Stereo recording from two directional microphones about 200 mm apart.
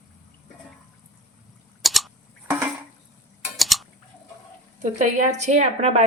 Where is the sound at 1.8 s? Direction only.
Centre (ahead or behind).